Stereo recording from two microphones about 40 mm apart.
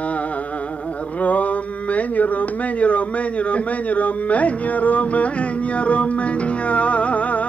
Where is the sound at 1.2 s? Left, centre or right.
Left.